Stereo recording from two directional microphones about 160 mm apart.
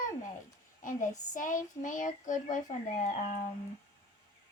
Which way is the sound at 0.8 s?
55° left (ahead or behind).